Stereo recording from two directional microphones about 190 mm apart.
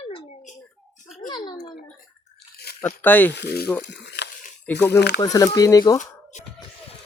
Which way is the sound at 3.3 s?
60° left (ahead or behind).